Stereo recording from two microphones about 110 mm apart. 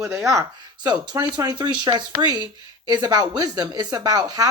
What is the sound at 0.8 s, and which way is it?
A woman's voice, 40° right (ahead or behind).